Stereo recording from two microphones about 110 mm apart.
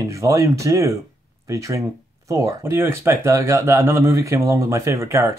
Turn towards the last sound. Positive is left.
turn(degrees=-25)  # may be behind; listen again after turning